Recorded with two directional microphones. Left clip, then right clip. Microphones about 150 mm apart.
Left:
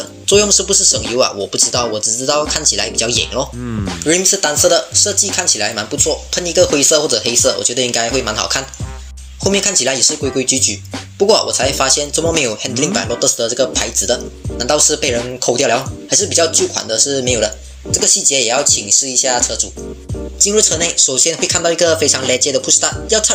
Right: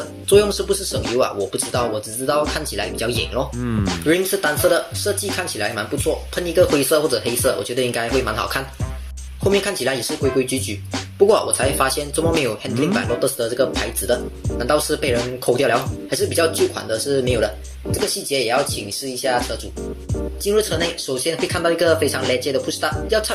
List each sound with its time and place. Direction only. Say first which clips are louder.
0.3 s speech: left 3 dB; 40° left (ahead or behind)
3.6 s speech: even; centre (ahead or behind)
4.0 s speech: left 4 dB; 40° left (ahead or behind)
20.4 s speech: left 5 dB; 45° left (ahead or behind)